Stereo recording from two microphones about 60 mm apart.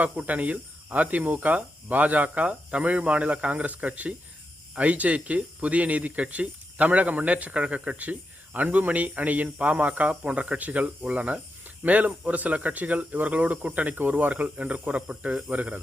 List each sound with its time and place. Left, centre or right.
0.0 s speech: right